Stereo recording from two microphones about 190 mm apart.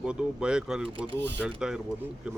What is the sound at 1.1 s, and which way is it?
Speech, 65° right (ahead or behind).